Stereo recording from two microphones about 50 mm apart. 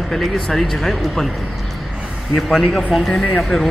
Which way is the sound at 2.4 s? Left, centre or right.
Centre.